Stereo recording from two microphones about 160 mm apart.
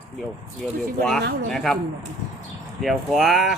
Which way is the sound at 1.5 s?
5° left (ahead or behind).